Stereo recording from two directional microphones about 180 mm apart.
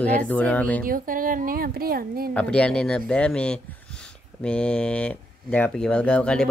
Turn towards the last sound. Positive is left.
turn(degrees=5)  # may be behind; listen again after turning